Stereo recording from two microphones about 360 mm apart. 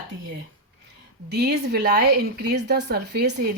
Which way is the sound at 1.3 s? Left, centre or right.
Right.